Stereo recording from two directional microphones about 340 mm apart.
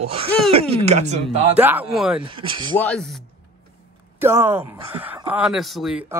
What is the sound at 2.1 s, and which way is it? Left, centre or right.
Speech, centre.